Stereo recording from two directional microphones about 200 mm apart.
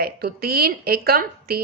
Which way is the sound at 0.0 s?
50° right (ahead or behind).